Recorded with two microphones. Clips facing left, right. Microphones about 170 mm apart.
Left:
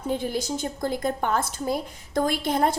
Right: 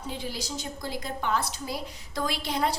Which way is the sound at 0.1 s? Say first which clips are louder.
Left 9 dB; 50° left (ahead or behind).